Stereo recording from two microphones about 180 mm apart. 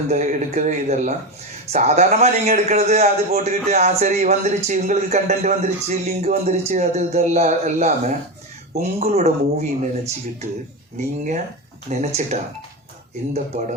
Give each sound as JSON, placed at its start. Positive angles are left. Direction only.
{"t": 0.1, "sound": "a man's voice", "side_deg": -40}